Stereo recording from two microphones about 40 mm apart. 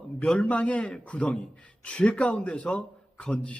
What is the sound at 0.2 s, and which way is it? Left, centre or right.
A man's voice, left.